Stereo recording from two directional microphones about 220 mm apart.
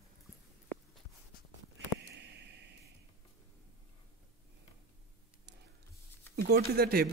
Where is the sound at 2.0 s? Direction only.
50° right (ahead or behind).